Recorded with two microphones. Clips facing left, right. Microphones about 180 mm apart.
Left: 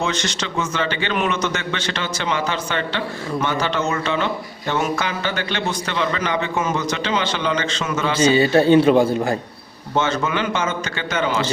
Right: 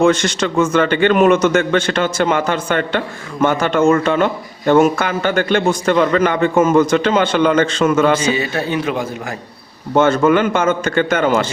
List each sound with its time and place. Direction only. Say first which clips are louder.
0.0 s a man's voice: right 10 dB; 50° right (ahead or behind)
8.2 s speech: left 4 dB; 30° left (ahead or behind)
9.9 s a man's voice: right 9 dB; 50° right (ahead or behind)